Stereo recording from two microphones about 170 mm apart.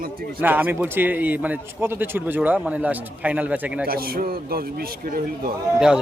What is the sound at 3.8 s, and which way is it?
A man's voice, 60° right (ahead or behind).